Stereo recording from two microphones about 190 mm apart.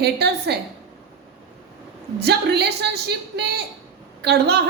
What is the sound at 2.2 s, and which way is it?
A woman's voice, 60° right (ahead or behind).